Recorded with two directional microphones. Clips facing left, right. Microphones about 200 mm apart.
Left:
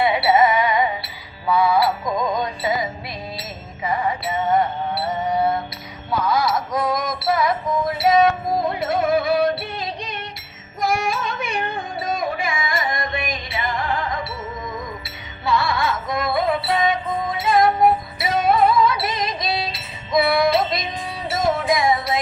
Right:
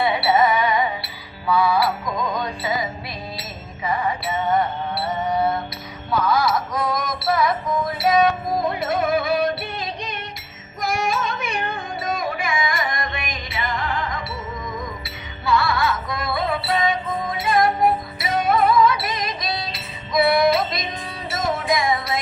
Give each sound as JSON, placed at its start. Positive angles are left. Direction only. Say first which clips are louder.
{"t": 0.0, "sound": "music", "louder": "left 2 dB", "side_deg": 25}
{"t": 3.8, "sound": "music", "louder": "left 1 dB", "side_deg": 20}
{"t": 10.8, "sound": "carnatic music", "louder": "left 1 dB", "side_deg": 30}
{"t": 15.4, "sound": "music", "louder": "even", "side_deg": 25}